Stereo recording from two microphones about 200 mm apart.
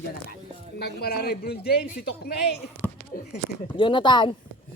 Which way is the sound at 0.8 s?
55° left (ahead or behind).